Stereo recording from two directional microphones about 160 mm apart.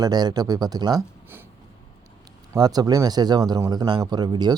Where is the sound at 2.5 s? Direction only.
25° right (ahead or behind).